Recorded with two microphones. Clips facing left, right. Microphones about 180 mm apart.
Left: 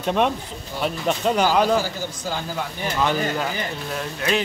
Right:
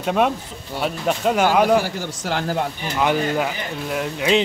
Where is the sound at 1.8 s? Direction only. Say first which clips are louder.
Right 2 dB; 85° right.